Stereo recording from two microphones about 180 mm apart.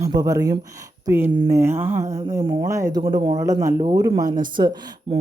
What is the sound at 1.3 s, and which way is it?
Speech, 25° right (ahead or behind).